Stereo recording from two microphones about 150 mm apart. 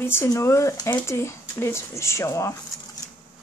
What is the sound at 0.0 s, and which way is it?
Speech, 15° left (ahead or behind).